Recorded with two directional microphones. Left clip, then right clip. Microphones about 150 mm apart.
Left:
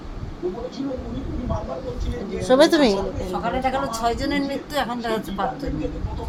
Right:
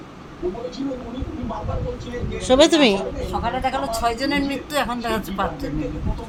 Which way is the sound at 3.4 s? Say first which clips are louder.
Even; 10° left (ahead or behind).